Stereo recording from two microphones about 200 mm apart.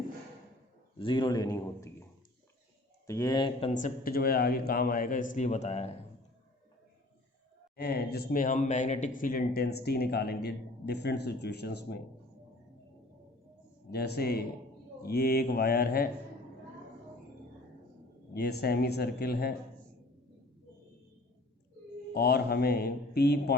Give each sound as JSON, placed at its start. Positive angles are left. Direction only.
{"t": 0.9, "sound": "a man's voice", "side_deg": 25}
{"t": 3.1, "sound": "a man's voice", "side_deg": 20}
{"t": 3.8, "sound": "speech", "side_deg": 45}
{"t": 7.8, "sound": "speech", "side_deg": 50}
{"t": 8.3, "sound": "speech", "side_deg": 40}
{"t": 13.9, "sound": "speech", "side_deg": 55}
{"t": 18.3, "sound": "speech", "side_deg": 55}
{"t": 22.1, "sound": "speech", "side_deg": 50}